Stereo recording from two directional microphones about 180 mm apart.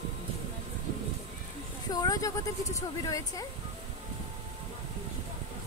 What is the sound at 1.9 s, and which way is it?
A woman's voice, 20° left (ahead or behind).